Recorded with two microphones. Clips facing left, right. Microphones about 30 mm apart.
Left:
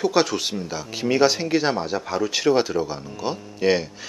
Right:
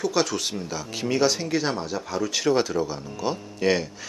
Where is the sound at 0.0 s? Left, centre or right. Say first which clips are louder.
Left 4 dB; centre.